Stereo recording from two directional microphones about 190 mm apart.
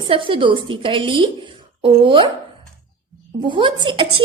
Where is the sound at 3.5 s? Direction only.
25° right (ahead or behind).